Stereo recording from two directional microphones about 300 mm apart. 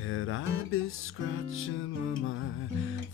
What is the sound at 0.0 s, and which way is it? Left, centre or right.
Music, left.